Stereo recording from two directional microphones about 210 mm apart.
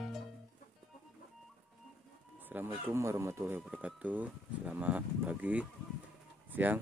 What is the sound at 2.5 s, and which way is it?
Bird, 10° right (ahead or behind).